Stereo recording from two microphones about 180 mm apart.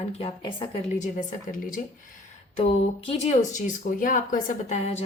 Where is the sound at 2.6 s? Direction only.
35° left (ahead or behind).